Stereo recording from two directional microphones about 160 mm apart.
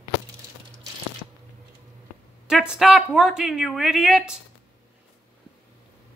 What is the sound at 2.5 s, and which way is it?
Speech, 5° right (ahead or behind).